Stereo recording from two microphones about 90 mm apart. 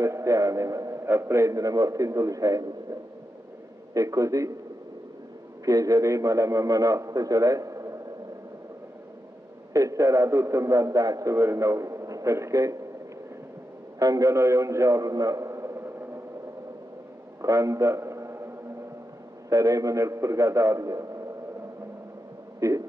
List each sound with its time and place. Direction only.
0.0 s a man's voice: 35° right (ahead or behind)
5.7 s a man's voice: 40° right (ahead or behind)
9.7 s a man's voice: 35° right (ahead or behind)
13.9 s a man's voice: 40° right (ahead or behind)
17.4 s a sound: 35° right (ahead or behind)
19.5 s a man's voice: 40° right (ahead or behind)
22.6 s heart sounds: 35° right (ahead or behind)